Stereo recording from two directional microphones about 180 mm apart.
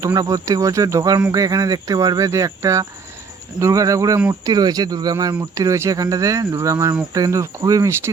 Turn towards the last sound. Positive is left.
turn(degrees=-20)  # may be behind; listen again after turning